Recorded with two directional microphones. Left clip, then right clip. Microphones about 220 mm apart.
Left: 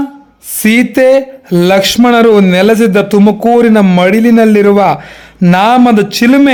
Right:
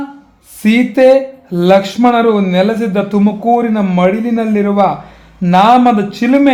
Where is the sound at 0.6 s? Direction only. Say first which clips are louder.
Left 1 dB; 40° left (ahead or behind).